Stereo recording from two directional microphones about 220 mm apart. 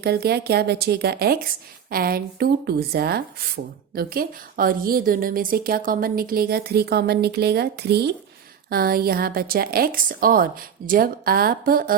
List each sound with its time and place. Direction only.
0.0 s a woman's voice: 45° right (ahead or behind)